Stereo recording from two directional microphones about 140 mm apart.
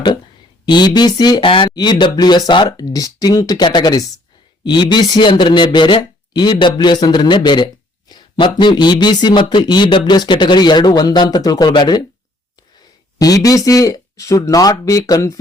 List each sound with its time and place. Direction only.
0.6 s speech: 30° left (ahead or behind)
13.1 s speech: 25° left (ahead or behind)